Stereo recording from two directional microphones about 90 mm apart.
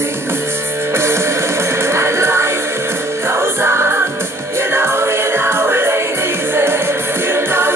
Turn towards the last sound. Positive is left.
turn(degrees=-25)  # may be behind; listen again after turning